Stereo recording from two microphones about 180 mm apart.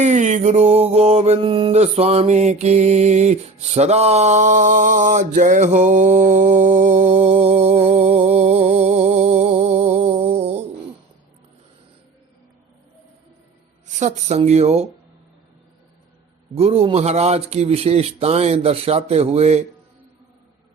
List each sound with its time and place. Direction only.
0.0 s mantra: 40° right (ahead or behind)
13.8 s mantra: 40° right (ahead or behind)
16.6 s mantra: 35° right (ahead or behind)